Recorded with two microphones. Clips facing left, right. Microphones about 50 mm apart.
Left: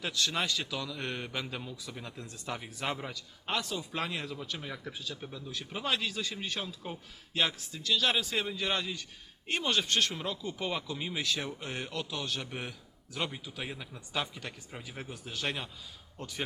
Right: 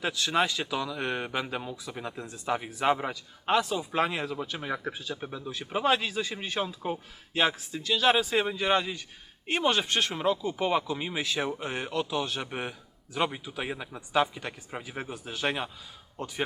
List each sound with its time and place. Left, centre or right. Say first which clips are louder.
0.0 s a man's voice: right 6 dB; centre